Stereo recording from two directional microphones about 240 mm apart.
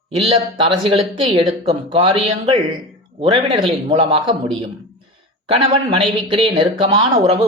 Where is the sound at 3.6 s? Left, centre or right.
Right.